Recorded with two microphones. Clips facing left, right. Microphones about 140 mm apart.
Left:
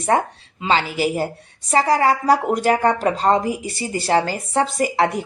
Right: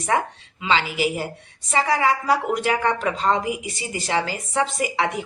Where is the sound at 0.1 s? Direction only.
35° left (ahead or behind).